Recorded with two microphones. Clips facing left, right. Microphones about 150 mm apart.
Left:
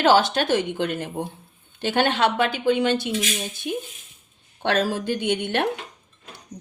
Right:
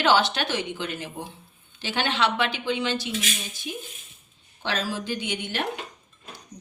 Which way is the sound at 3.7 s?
60° left (ahead or behind).